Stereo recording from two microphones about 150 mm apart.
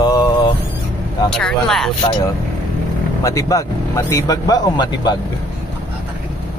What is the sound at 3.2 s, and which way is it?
Speech, 20° left (ahead or behind).